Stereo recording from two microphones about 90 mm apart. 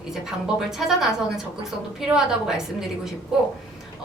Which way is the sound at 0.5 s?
5° right (ahead or behind).